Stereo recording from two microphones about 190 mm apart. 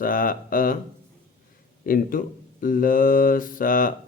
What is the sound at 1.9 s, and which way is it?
A man's voice, 50° left (ahead or behind).